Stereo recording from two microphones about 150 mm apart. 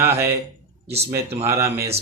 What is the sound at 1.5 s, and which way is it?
Speech, 20° right (ahead or behind).